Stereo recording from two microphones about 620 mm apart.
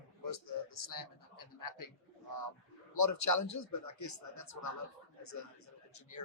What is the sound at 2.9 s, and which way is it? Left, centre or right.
Speech, left.